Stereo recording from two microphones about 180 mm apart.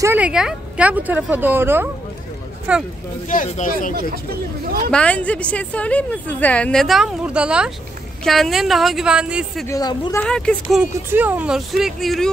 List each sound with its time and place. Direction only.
0.0 s speech: 10° right (ahead or behind)
3.3 s speech: 50° left (ahead or behind)
4.9 s a woman's voice: 5° left (ahead or behind)
9.7 s a woman's voice: 20° left (ahead or behind)
10.2 s a woman's voice: 5° left (ahead or behind)
10.8 s a woman's voice: 10° right (ahead or behind)